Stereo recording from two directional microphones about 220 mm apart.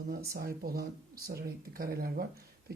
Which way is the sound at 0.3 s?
40° right (ahead or behind).